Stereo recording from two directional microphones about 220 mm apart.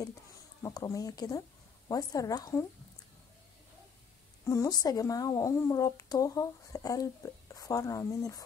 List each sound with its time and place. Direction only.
0.6 s a woman's voice: 15° left (ahead or behind)
4.5 s a woman's voice: 15° left (ahead or behind)